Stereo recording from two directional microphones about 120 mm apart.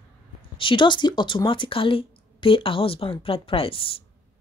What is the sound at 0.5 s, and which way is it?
Speech, 45° left (ahead or behind).